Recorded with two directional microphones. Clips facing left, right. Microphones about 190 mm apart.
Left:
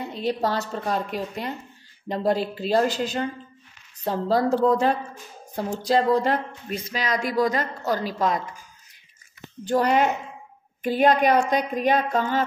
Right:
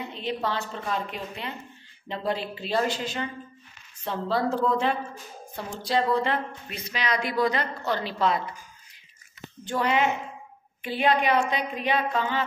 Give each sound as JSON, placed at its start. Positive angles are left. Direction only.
{"t": 0.1, "sound": "speech", "side_deg": 40}
{"t": 9.7, "sound": "a woman's voice", "side_deg": 40}